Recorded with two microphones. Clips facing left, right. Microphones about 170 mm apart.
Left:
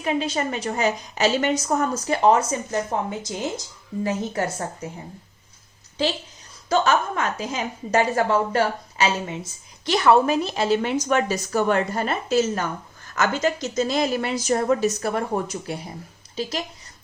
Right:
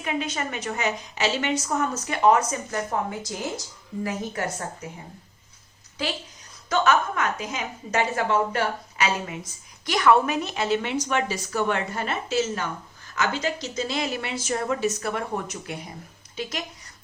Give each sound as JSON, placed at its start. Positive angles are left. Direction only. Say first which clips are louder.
{"t": 0.0, "sound": "a woman's voice", "louder": "left 5 dB", "side_deg": 30}
{"t": 6.0, "sound": "a woman's voice", "louder": "left 6 dB", "side_deg": 30}